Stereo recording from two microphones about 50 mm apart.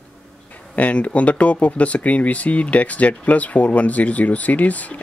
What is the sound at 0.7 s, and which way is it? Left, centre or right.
Speech, left.